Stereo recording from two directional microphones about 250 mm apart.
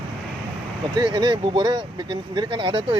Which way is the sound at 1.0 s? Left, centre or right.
Centre.